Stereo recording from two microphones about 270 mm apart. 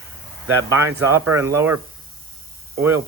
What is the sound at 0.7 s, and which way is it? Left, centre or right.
Speech, centre.